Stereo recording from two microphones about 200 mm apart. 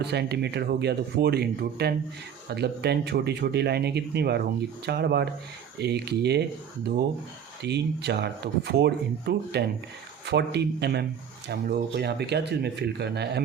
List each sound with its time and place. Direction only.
0.0 s speech: 55° right (ahead or behind)
7.6 s speech: 55° right (ahead or behind)